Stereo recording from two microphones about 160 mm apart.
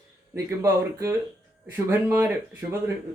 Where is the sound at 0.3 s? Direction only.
20° right (ahead or behind).